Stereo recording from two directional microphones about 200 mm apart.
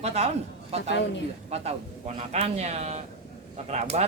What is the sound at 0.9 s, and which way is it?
Speech, 60° left (ahead or behind).